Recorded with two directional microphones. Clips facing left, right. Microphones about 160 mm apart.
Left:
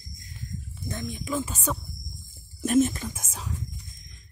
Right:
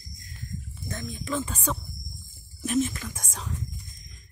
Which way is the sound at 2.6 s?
45° left (ahead or behind).